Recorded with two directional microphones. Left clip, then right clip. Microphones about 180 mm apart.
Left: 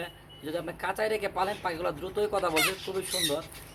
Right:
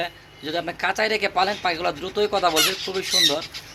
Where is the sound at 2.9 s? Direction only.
25° right (ahead or behind).